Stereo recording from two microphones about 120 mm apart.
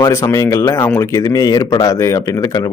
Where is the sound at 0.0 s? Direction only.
25° left (ahead or behind).